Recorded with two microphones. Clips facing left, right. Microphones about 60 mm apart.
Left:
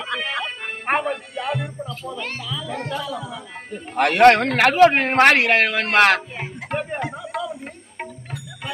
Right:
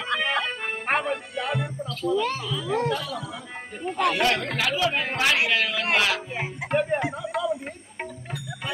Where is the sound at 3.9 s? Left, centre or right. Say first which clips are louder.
Left 10 dB; left.